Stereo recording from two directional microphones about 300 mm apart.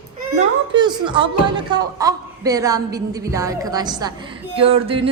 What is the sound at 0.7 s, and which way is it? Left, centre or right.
A woman's voice, centre.